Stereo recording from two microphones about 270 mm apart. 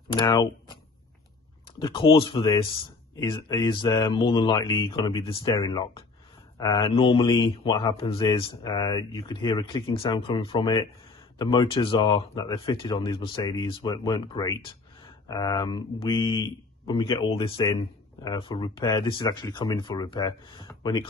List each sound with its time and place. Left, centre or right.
0.1 s speech: centre
1.8 s speech: centre